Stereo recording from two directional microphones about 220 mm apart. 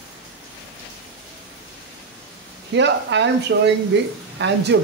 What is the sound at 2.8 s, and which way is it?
Speech, 55° right (ahead or behind).